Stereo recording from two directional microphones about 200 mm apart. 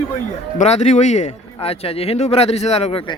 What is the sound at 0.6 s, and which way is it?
A man's voice, 35° left (ahead or behind).